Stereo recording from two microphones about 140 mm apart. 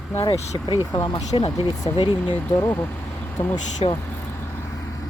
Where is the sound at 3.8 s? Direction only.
45° left (ahead or behind).